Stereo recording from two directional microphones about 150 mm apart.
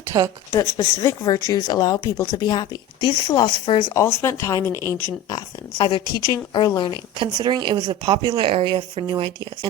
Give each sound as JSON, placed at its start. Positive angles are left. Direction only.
{"t": 0.1, "sound": "speech", "side_deg": -20}
{"t": 0.5, "sound": "speech", "side_deg": 20}
{"t": 4.0, "sound": "speech", "side_deg": 15}
{"t": 5.3, "sound": "a woman's voice", "side_deg": 30}
{"t": 7.2, "sound": "speech", "side_deg": -30}